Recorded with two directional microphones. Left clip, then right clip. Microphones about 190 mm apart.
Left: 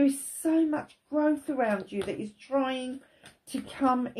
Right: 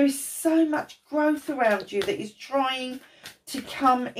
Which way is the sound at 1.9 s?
45° left (ahead or behind).